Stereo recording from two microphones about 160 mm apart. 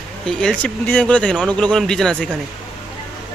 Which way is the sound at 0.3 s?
5° left (ahead or behind).